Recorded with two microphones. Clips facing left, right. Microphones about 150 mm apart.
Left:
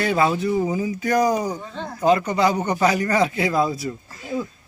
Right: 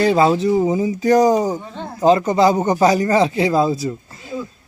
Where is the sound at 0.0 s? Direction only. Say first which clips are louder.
Right 6 dB; 30° right (ahead or behind).